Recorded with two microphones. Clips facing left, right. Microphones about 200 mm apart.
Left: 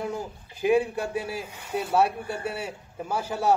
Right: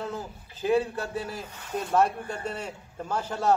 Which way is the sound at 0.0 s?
15° left (ahead or behind).